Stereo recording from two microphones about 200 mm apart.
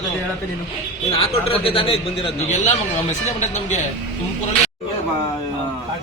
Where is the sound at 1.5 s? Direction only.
30° left (ahead or behind).